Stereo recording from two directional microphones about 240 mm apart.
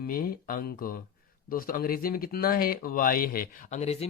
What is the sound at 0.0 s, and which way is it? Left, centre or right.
Speech, left.